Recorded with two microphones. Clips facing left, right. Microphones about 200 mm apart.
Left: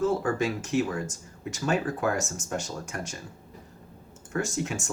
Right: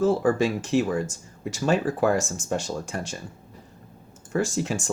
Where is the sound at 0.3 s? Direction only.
30° right (ahead or behind).